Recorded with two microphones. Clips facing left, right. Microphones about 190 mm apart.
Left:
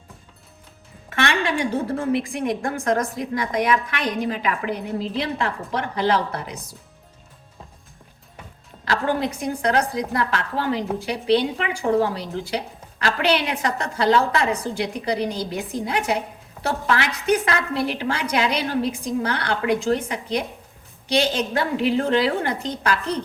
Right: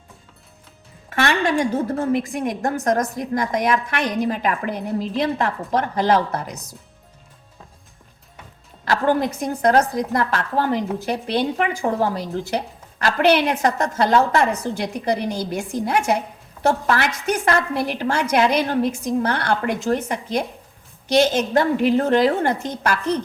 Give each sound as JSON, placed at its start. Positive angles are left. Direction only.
{"t": 1.2, "sound": "a woman's voice", "side_deg": -45}
{"t": 8.8, "sound": "a woman's voice", "side_deg": -50}